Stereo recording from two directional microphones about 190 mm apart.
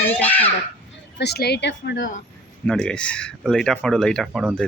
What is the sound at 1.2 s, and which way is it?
Speech, 55° left (ahead or behind).